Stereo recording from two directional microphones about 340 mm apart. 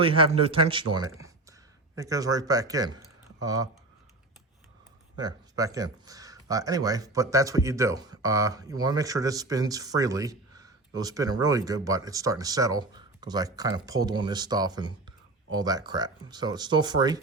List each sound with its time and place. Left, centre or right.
0.0 s speech: centre
5.1 s speech: centre